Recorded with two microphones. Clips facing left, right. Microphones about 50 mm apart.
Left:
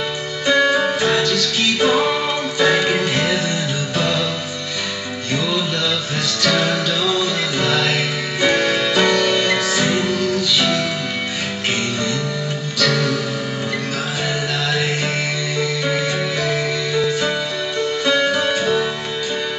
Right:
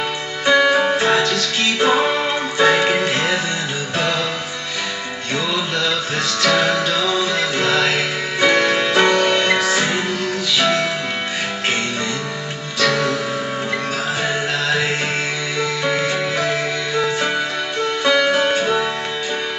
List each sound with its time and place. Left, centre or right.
0.5 s music: right
5.8 s music: right
12.7 s music: right
14.2 s music: right